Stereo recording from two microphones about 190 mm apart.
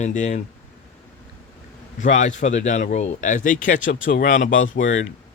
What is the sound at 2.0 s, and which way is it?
A man's voice, 40° left (ahead or behind).